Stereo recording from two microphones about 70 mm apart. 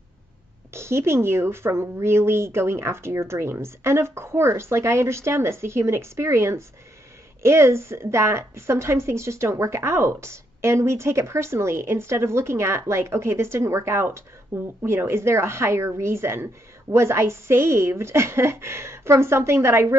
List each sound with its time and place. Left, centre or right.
0.7 s a woman's voice: right